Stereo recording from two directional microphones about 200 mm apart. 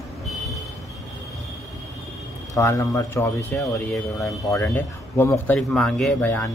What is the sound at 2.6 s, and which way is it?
Speech, 15° left (ahead or behind).